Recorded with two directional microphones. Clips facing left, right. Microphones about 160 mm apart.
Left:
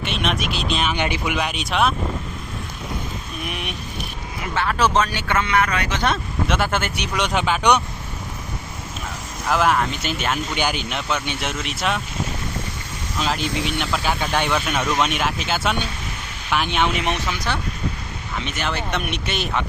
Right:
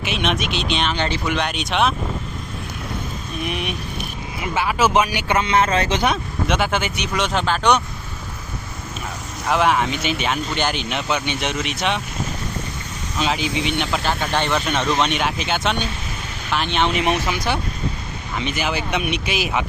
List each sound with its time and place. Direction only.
0.0 s speech: centre (ahead or behind)
0.9 s speech: 15° left (ahead or behind)
1.4 s speech: centre (ahead or behind)
3.4 s a man's voice: centre (ahead or behind); by 6.0 s 25° right (ahead or behind)
6.0 s a man's voice: 5° right (ahead or behind)
9.5 s speech: centre (ahead or behind)
13.1 s speech: centre (ahead or behind)
17.2 s a man's voice: 15° right (ahead or behind)
18.4 s speech: centre (ahead or behind)